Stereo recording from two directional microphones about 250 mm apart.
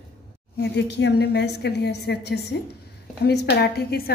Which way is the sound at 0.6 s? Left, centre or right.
Left.